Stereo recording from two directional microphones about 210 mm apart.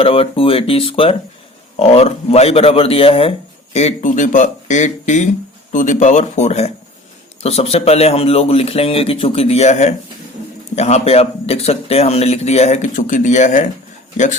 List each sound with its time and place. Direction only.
0.0 s a man's voice: 25° left (ahead or behind)